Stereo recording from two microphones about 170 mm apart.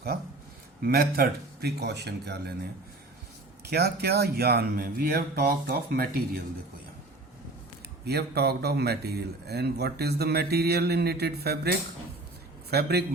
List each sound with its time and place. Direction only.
0.1 s speech: 70° right (ahead or behind)
3.7 s speech: 70° right (ahead or behind)
8.0 s speech: 70° right (ahead or behind)
12.7 s speech: 70° right (ahead or behind)